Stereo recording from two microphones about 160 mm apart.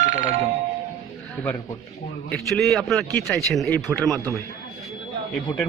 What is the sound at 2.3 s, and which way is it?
A man's voice, centre (ahead or behind).